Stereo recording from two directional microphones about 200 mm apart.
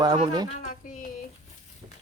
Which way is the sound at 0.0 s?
20° right (ahead or behind).